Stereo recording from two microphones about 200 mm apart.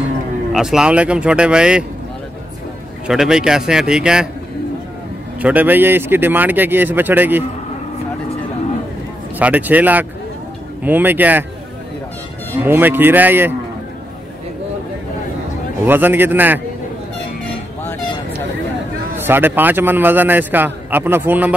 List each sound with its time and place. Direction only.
0.5 s speech: centre (ahead or behind)
3.1 s speech: 5° right (ahead or behind)
5.4 s a man's voice: 10° right (ahead or behind)
9.4 s a man's voice: 10° right (ahead or behind)
12.6 s a man's voice: 10° right (ahead or behind)
15.8 s a man's voice: 10° right (ahead or behind)
19.1 s a man's voice: 10° right (ahead or behind)